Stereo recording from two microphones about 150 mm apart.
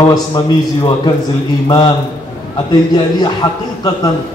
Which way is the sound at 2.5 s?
30° left (ahead or behind).